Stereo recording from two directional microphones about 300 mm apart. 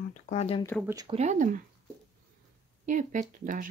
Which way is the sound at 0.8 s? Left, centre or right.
Centre.